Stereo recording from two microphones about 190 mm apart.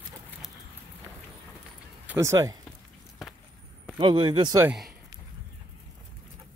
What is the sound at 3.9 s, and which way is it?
Speech, 25° right (ahead or behind).